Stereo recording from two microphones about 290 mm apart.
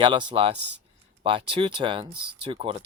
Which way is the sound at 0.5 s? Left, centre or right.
Right.